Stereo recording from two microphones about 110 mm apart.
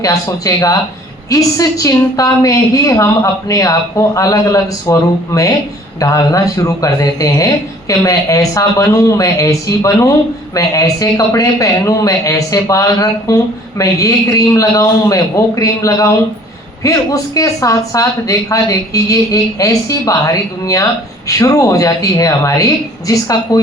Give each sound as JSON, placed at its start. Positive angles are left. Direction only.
{"t": 0.0, "sound": "a woman's voice", "side_deg": 30}